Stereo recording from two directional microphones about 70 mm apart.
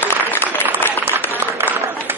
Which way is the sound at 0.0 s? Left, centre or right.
Left.